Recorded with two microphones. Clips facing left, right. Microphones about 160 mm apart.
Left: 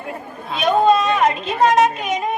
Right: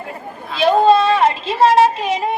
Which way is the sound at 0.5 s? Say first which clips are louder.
Right 3 dB; 30° right (ahead or behind).